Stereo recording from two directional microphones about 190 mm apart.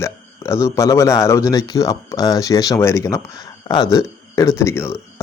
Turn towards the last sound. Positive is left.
turn(degrees=15)  # may be behind; listen again after turning